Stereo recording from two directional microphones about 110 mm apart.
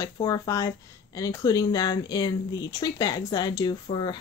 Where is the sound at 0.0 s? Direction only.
30° left (ahead or behind).